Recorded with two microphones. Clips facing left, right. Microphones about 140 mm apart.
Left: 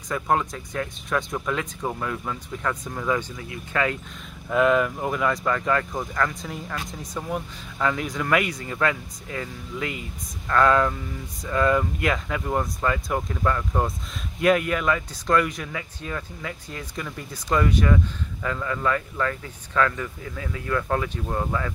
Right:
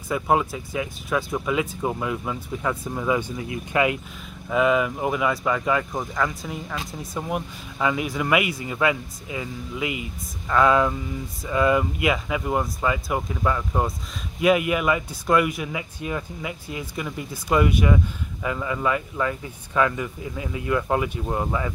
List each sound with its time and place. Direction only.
0.1 s speech: 10° right (ahead or behind)
4.5 s speech: 5° right (ahead or behind)